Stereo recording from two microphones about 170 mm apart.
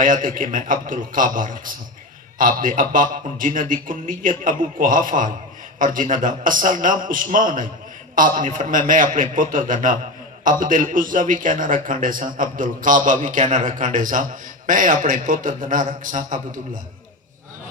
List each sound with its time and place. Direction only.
0.0 s a man's voice: 50° right (ahead or behind)